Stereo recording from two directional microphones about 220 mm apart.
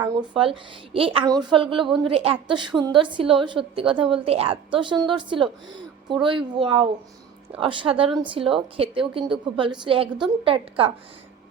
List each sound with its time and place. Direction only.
0.0 s a woman's voice: 20° right (ahead or behind)